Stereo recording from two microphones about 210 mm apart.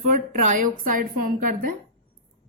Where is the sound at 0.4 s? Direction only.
40° right (ahead or behind).